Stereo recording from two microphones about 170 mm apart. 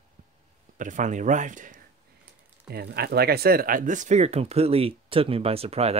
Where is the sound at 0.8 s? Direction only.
45° right (ahead or behind).